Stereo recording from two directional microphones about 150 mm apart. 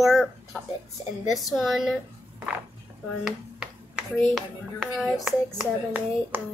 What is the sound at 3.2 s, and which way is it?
Speech, 5° right (ahead or behind).